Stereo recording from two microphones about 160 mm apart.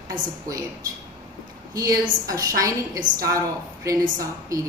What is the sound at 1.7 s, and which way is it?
A woman's voice, 20° right (ahead or behind).